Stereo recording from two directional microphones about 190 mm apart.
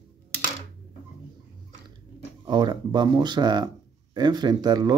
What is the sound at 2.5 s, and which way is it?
Speech, 25° right (ahead or behind).